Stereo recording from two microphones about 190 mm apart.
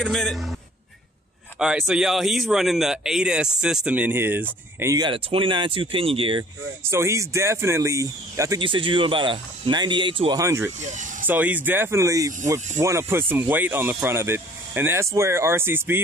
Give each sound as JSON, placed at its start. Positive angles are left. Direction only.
{"t": 0.0, "sound": "a man's voice", "side_deg": 0}
{"t": 1.6, "sound": "a man's voice", "side_deg": -5}
{"t": 6.8, "sound": "speech", "side_deg": -15}
{"t": 10.4, "sound": "speech", "side_deg": -15}
{"t": 10.8, "sound": "speech", "side_deg": -40}
{"t": 11.2, "sound": "speech", "side_deg": -10}